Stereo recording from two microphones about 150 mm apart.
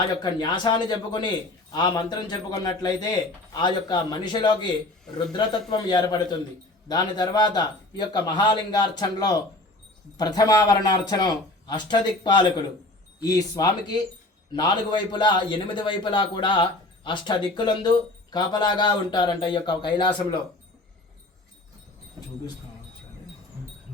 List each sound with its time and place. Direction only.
0.2 s a man's voice: 30° left (ahead or behind)